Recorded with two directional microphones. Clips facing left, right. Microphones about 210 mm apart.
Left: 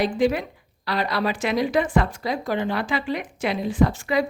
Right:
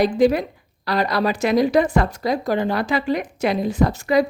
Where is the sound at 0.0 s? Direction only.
40° right (ahead or behind).